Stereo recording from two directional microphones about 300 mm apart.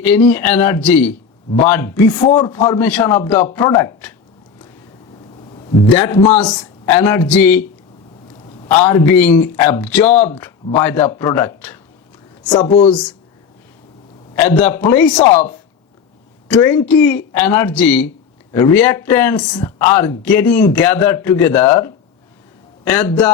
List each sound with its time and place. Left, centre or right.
0.1 s speech: centre
5.5 s a sound: centre
6.0 s speech: centre
8.7 s speech: centre
14.3 s speech: centre
16.5 s speech: centre